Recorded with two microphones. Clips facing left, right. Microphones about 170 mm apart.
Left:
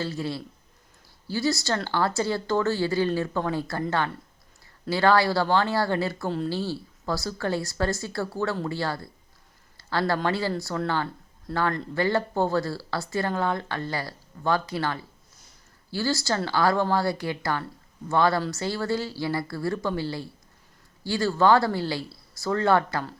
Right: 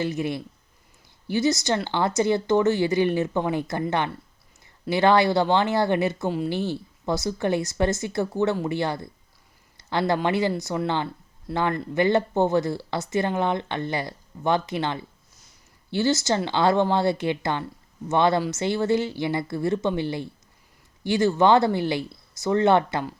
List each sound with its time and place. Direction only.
0.0 s speech: 20° right (ahead or behind)
9.7 s a sound: 20° right (ahead or behind)
10.2 s speech: 20° right (ahead or behind)